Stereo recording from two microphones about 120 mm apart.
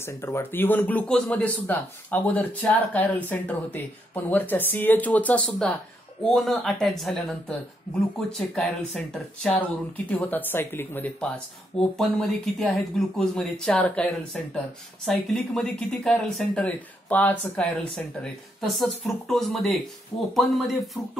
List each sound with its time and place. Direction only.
0.0 s speech: 20° left (ahead or behind); by 9.6 s 5° left (ahead or behind)
10.0 s speech: 15° left (ahead or behind)
12.0 s speech: centre (ahead or behind)
15.0 s speech: 5° left (ahead or behind)